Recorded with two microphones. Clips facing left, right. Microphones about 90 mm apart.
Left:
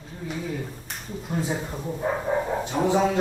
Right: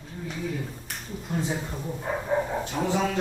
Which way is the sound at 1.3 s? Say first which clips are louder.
Left 1 dB; 10° left (ahead or behind).